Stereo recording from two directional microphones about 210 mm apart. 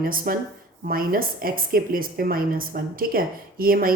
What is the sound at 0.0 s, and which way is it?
A woman's voice, 45° right (ahead or behind).